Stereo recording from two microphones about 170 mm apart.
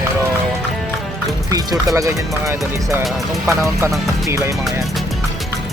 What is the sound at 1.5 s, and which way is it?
Speech, 20° right (ahead or behind).